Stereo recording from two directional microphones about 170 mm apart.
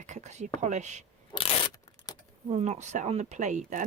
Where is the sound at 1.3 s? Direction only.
35° left (ahead or behind).